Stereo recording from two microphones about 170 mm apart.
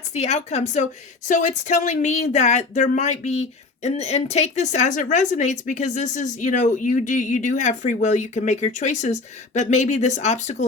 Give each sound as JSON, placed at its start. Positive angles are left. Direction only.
{"t": 0.1, "sound": "speech", "side_deg": 40}